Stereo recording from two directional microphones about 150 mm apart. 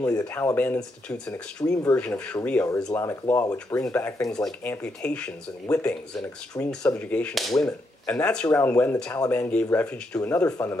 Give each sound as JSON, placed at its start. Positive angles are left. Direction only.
{"t": 0.2, "sound": "speech", "side_deg": 15}